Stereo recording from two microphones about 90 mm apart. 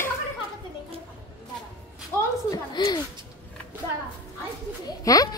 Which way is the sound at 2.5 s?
50° left (ahead or behind).